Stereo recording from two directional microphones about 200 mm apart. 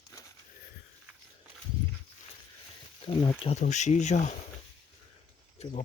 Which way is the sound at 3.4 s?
35° left (ahead or behind).